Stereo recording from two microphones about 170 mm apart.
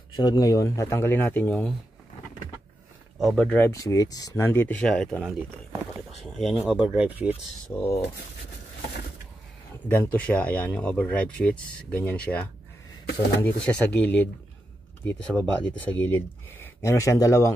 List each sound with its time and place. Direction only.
0.1 s speech: 25° left (ahead or behind)
3.2 s speech: 5° left (ahead or behind)
7.7 s speech: 15° left (ahead or behind)
9.8 s speech: 10° left (ahead or behind)
13.7 s speech: 5° left (ahead or behind)